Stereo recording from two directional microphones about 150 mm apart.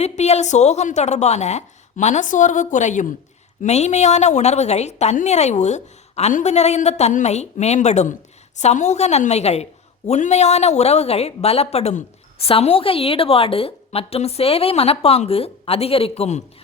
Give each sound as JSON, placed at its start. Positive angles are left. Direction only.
{"t": 0.0, "sound": "a woman's voice", "side_deg": 45}